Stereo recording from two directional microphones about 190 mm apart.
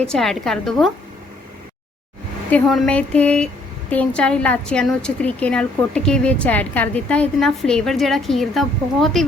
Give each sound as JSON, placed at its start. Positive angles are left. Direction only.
{"t": 0.0, "sound": "a woman's voice", "side_deg": 5}
{"t": 2.5, "sound": "a woman's voice", "side_deg": 5}